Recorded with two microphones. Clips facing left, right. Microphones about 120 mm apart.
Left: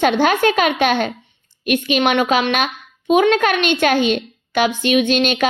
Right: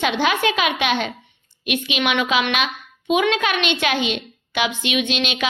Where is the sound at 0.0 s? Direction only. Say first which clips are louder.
Left 5 dB; 45° left (ahead or behind).